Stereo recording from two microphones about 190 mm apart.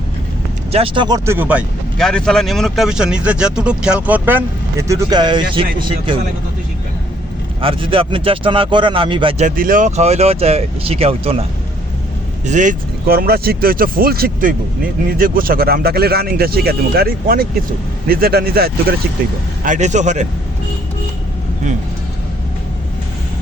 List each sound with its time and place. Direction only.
0.7 s speech: 30° right (ahead or behind); by 1.6 s 10° right (ahead or behind)
2.0 s speech: 5° left (ahead or behind); by 6.1 s 25° right (ahead or behind)
7.6 s speech: 25° right (ahead or behind)
9.6 s speech: 45° right (ahead or behind); by 11.4 s 30° right (ahead or behind)
12.5 s speech: 40° right (ahead or behind)